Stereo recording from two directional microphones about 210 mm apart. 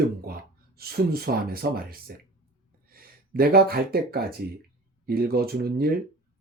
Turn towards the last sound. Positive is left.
turn(degrees=-45)  # may be behind; listen again after turning